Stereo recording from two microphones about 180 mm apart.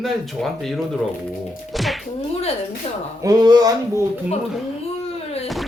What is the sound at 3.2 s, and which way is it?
Speech, 20° right (ahead or behind).